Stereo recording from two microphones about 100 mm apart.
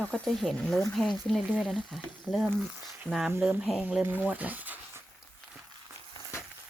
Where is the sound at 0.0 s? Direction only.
5° left (ahead or behind).